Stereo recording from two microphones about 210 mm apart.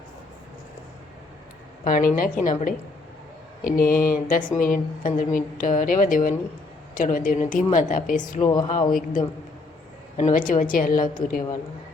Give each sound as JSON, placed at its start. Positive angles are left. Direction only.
{"t": 1.8, "sound": "a woman's voice", "side_deg": 40}
{"t": 8.4, "sound": "speech", "side_deg": 20}
{"t": 8.9, "sound": "a woman's voice", "side_deg": 40}